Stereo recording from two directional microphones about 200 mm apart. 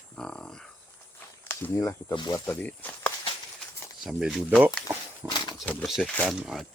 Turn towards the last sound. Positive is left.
turn(degrees=0)  # may be behind; listen again after turning